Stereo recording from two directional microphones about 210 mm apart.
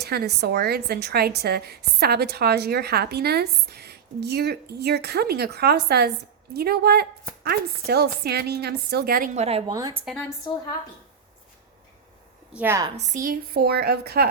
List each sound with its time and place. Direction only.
0.0 s a woman's voice: 50° right (ahead or behind); by 9.7 s 30° right (ahead or behind)
9.7 s a woman's voice: 15° right (ahead or behind)
10.1 s a woman's voice: 5° left (ahead or behind)
12.5 s a woman's voice: 10° right (ahead or behind)
13.0 s a woman's voice: 40° right (ahead or behind)